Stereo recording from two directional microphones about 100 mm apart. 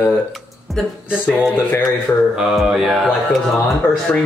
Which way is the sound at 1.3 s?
20° left (ahead or behind).